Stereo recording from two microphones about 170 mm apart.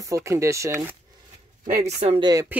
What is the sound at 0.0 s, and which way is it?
Speech, 20° right (ahead or behind).